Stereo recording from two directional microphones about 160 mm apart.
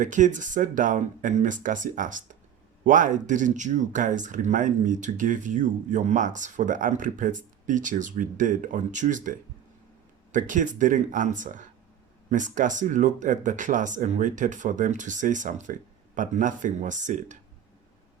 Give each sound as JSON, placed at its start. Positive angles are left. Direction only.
{"t": 0.0, "sound": "speech", "side_deg": -50}
{"t": 10.3, "sound": "speech", "side_deg": -55}